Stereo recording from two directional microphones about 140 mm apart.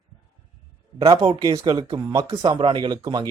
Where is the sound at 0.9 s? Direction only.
35° right (ahead or behind).